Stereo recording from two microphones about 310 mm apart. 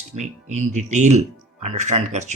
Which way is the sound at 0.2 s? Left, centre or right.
Right.